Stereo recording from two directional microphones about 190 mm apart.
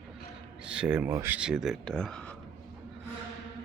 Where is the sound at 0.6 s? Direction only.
5° right (ahead or behind).